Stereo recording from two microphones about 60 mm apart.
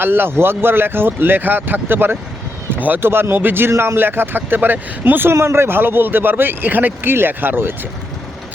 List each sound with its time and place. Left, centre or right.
0.0 s speech: right